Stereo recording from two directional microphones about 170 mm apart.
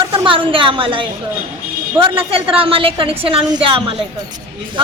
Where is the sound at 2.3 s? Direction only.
35° right (ahead or behind).